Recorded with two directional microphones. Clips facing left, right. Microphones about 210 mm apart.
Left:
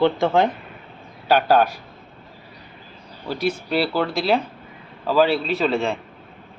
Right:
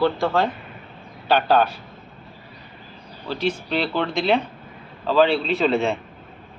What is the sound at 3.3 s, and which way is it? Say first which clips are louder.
Speech: left 1 dB; 10° left (ahead or behind).